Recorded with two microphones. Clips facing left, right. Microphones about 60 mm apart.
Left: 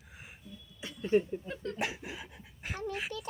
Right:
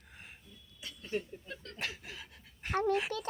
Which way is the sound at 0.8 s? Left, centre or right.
Left.